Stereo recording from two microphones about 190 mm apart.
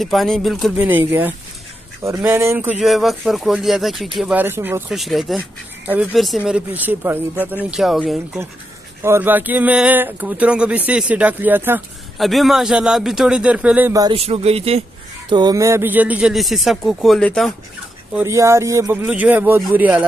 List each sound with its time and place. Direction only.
0.0 s speech: centre (ahead or behind)
2.8 s speech: centre (ahead or behind)
9.0 s speech: 10° right (ahead or behind)
12.2 s speech: centre (ahead or behind)
14.0 s speech: 30° right (ahead or behind); by 17.6 s 5° left (ahead or behind)
18.1 s speech: 15° right (ahead or behind)